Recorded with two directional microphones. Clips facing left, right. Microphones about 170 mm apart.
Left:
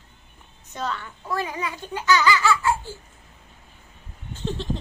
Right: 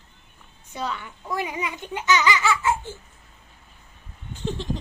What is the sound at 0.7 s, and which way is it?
A child's voice, 10° right (ahead or behind).